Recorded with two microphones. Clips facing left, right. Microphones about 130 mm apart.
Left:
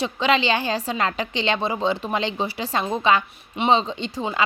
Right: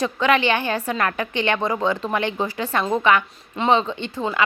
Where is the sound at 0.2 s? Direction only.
25° left (ahead or behind).